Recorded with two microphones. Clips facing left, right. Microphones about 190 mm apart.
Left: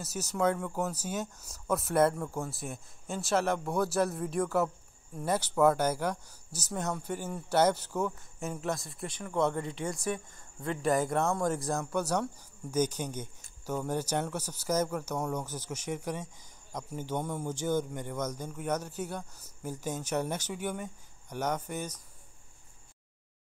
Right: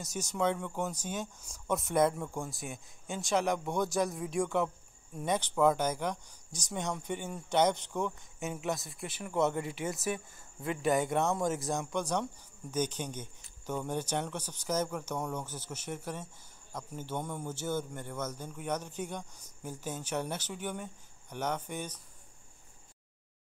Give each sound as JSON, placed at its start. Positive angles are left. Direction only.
{"t": 0.0, "sound": "speech", "side_deg": 5}